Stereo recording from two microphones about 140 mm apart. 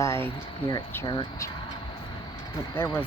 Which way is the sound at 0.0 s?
20° left (ahead or behind).